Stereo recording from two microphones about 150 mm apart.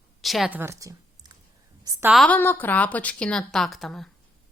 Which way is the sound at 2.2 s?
10° left (ahead or behind).